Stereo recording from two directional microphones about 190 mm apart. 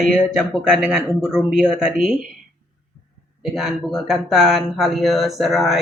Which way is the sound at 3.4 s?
Centre (ahead or behind).